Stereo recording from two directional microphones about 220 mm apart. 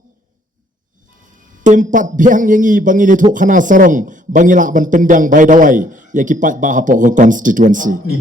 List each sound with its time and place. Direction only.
1.6 s a man's voice: 35° right (ahead or behind)